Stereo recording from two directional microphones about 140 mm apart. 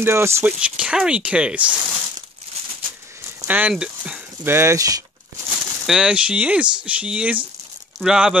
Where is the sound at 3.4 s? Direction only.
10° right (ahead or behind).